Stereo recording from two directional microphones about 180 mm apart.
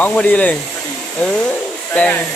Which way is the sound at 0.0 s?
10° left (ahead or behind).